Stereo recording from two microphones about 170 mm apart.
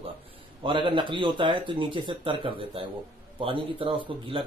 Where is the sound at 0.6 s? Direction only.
30° right (ahead or behind).